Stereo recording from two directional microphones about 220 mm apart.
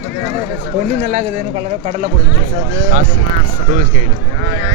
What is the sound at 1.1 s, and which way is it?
Speech, 35° right (ahead or behind).